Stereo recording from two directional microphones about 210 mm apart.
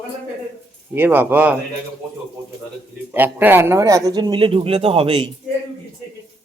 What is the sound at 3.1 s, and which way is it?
Speech, 10° right (ahead or behind).